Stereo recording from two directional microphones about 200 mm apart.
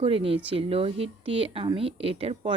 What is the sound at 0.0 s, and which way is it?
A woman's voice, 30° right (ahead or behind).